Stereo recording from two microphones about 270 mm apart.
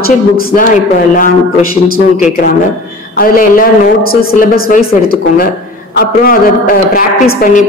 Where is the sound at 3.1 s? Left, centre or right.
Left.